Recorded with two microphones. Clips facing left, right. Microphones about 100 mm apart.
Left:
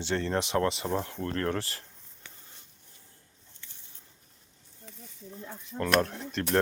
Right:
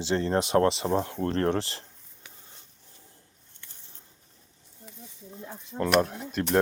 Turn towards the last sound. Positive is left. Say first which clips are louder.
# right 3 dB
turn(degrees=-15)  # may be behind; listen again after turning